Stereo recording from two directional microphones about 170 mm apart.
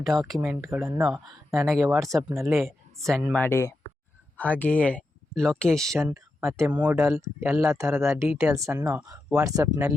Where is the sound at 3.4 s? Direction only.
15° left (ahead or behind).